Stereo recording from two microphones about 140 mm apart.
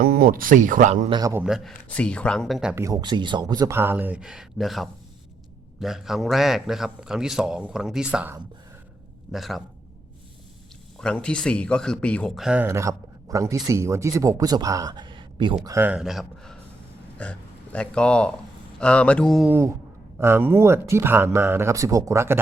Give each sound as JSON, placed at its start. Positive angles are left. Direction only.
{"t": 0.0, "sound": "speech", "side_deg": -90}
{"t": 1.5, "sound": "a man's voice", "side_deg": -5}
{"t": 1.9, "sound": "speech", "side_deg": 10}
{"t": 2.7, "sound": "speech", "side_deg": -25}
{"t": 3.8, "sound": "a man's voice", "side_deg": -15}
{"t": 9.3, "sound": "a man's voice", "side_deg": 0}
{"t": 10.9, "sound": "speech", "side_deg": 5}
{"t": 12.6, "sound": "speech", "side_deg": -20}
{"t": 15.6, "sound": "speech", "side_deg": -20}
{"t": 15.9, "sound": "a man's voice", "side_deg": -5}
{"t": 19.5, "sound": "speech", "side_deg": -15}